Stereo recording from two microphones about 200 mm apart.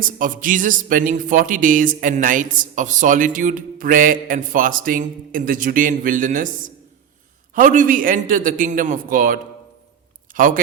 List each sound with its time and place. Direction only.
0.2 s speech: 40° right (ahead or behind)
7.5 s speech: 40° right (ahead or behind)